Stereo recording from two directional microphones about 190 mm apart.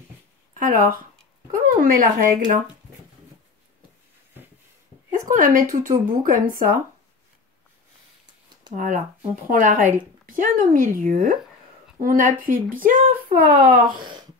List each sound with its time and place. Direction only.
0.6 s speech: 45° right (ahead or behind)
5.3 s speech: 45° right (ahead or behind)
8.7 s speech: 40° right (ahead or behind)